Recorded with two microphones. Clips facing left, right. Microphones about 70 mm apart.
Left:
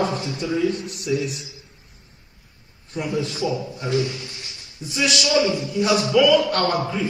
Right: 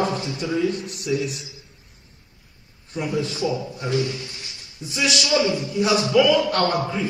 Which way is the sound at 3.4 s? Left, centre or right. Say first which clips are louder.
Even; right.